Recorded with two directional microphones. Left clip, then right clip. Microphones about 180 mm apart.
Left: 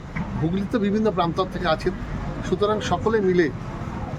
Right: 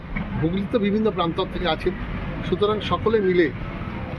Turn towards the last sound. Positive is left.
turn(degrees=20)  # may be behind; listen again after turning